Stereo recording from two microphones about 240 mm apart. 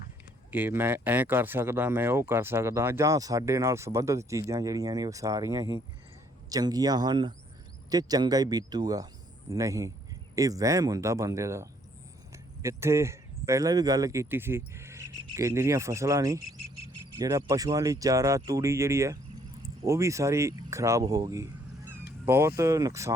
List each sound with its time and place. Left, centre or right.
0.5 s speech: centre